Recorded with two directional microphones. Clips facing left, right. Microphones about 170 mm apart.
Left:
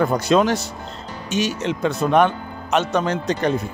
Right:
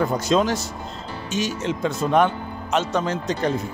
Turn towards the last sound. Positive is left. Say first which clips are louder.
# left 2 dB
turn(degrees=65)  # may be behind; listen again after turning